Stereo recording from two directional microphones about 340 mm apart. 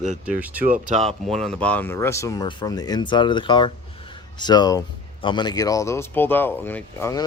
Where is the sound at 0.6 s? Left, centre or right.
Right.